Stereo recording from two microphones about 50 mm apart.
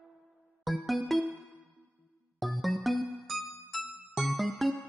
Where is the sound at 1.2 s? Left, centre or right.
Right.